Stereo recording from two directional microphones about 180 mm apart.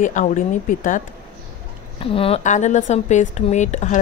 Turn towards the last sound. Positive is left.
turn(degrees=40)  # may be behind; listen again after turning